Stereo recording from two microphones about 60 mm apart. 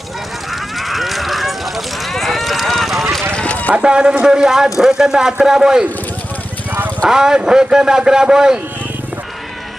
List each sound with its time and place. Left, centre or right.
0.8 s a sound: centre
2.1 s run: centre
3.3 s run: left
3.7 s speech: centre
7.1 s speech: centre